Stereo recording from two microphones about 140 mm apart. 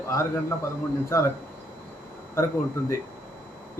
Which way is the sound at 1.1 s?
20° left (ahead or behind).